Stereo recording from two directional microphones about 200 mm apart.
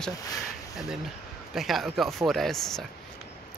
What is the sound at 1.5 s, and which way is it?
Speech, centre (ahead or behind).